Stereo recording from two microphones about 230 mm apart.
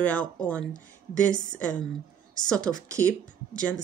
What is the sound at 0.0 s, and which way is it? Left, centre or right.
Speech, centre.